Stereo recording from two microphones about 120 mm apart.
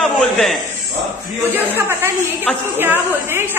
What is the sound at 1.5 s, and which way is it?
A woman's voice, 15° right (ahead or behind).